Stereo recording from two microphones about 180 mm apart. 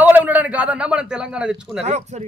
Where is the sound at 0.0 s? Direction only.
10° right (ahead or behind).